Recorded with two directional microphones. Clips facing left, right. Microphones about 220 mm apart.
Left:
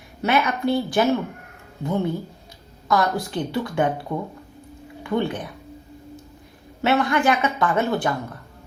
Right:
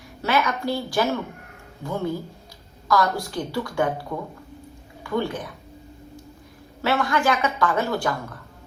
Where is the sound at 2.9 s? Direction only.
20° left (ahead or behind).